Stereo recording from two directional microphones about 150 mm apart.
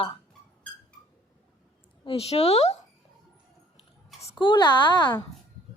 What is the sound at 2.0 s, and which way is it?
Speech, 40° left (ahead or behind).